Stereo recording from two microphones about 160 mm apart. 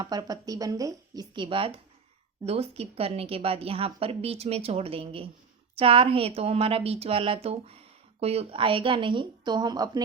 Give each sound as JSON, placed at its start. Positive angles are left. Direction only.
{"t": 0.0, "sound": "a woman's voice", "side_deg": -25}